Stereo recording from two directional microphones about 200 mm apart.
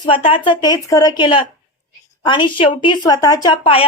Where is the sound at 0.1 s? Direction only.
25° left (ahead or behind).